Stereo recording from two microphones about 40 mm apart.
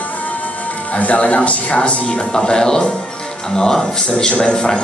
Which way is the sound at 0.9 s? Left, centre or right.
Left.